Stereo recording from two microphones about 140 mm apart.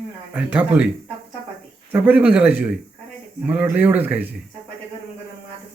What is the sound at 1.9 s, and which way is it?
Speech, 10° right (ahead or behind).